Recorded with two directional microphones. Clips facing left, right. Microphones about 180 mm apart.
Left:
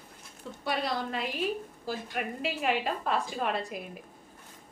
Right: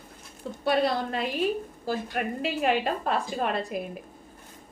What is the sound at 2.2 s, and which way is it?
Speech, 45° right (ahead or behind).